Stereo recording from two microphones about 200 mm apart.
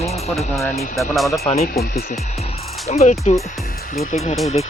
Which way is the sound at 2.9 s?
35° left (ahead or behind).